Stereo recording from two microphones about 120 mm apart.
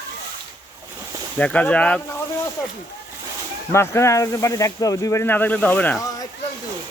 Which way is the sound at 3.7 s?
25° left (ahead or behind).